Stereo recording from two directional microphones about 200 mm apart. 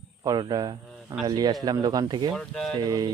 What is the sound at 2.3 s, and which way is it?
Speech, centre (ahead or behind).